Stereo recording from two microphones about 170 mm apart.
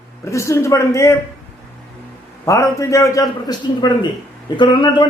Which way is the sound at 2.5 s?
20° left (ahead or behind).